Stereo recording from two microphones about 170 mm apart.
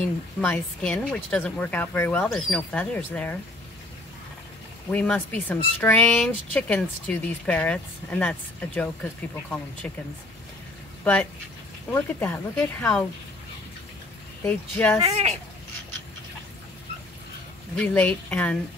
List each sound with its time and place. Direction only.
0.4 s speech: 10° left (ahead or behind)
4.9 s speech: 5° left (ahead or behind)
11.9 s speech: 10° left (ahead or behind)
14.4 s speech: 10° left (ahead or behind)
15.0 s speech: 35° right (ahead or behind)
17.7 s speech: 10° left (ahead or behind)